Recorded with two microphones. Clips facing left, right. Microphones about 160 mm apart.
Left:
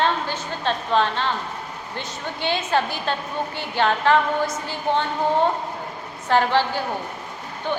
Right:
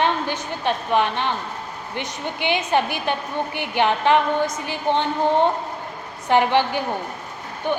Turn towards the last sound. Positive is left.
turn(degrees=-15)  # may be behind; listen again after turning